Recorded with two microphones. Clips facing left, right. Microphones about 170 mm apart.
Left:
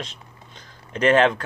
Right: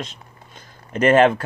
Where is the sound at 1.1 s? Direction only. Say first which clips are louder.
Right 4 dB; 10° right (ahead or behind).